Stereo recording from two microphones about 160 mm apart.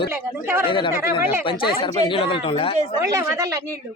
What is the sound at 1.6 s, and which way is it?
Speech, 30° left (ahead or behind).